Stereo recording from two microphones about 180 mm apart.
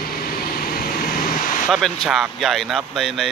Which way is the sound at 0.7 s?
55° left (ahead or behind).